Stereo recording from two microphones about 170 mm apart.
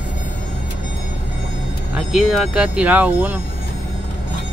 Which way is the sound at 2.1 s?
Centre (ahead or behind).